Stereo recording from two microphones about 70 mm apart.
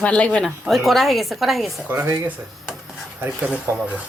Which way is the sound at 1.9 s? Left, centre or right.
Right.